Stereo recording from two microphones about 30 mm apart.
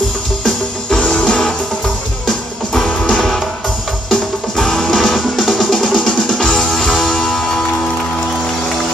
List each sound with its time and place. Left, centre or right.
1.0 s music: left; by 6.0 s centre
6.0 s music: centre